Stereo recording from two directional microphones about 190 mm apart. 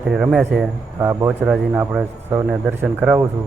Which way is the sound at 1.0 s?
15° right (ahead or behind).